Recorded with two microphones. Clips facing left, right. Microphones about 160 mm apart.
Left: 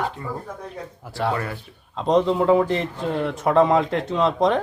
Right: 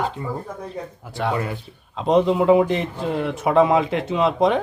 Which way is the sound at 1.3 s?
15° right (ahead or behind).